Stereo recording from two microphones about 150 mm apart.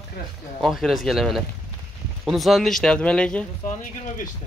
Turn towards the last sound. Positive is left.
turn(degrees=55)  # may be behind; listen again after turning